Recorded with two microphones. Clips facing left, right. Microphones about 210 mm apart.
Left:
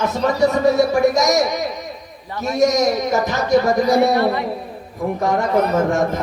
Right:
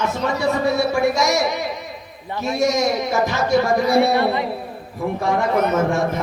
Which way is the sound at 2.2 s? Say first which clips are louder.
Left 1 dB; 20° right (ahead or behind).